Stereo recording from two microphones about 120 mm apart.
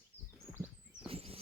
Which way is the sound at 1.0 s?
55° right (ahead or behind).